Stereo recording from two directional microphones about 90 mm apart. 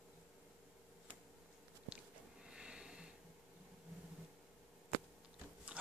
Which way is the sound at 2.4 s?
10° right (ahead or behind).